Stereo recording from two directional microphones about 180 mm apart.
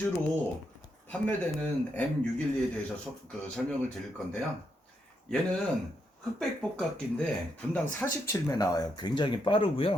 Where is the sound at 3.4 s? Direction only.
5° left (ahead or behind).